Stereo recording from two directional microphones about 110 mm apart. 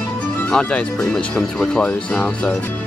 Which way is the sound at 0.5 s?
10° left (ahead or behind).